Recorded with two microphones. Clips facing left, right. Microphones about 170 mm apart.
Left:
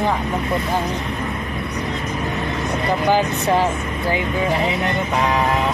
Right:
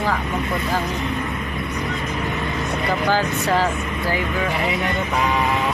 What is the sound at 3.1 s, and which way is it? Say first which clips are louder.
Speech: left 3 dB; 20° left (ahead or behind).